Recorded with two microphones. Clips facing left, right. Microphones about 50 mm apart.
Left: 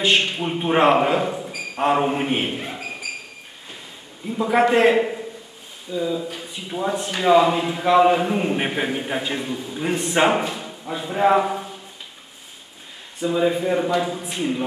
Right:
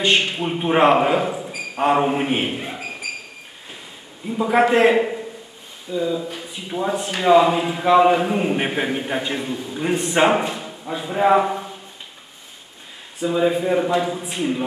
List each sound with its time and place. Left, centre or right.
0.0 s a man's voice: centre
4.3 s speech: centre
13.2 s speech: centre